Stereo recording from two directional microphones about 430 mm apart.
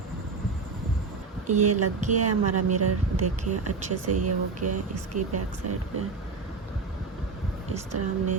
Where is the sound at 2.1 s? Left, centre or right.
Right.